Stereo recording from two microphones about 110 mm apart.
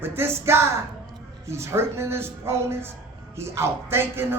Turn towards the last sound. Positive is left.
turn(degrees=-20)  # may be behind; listen again after turning